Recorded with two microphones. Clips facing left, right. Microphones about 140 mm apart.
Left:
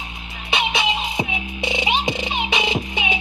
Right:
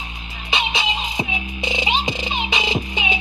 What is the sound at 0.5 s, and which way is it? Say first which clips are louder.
Music: left 2 dB; 60° left (ahead or behind).